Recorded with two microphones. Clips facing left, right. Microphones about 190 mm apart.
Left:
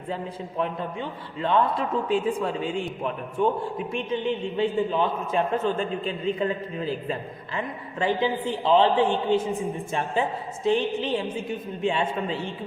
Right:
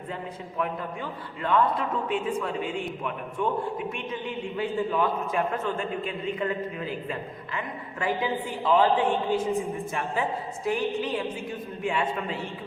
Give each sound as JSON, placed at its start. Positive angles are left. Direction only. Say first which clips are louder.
{"t": 1.4, "sound": "a man's voice", "louder": "left 1 dB", "side_deg": 30}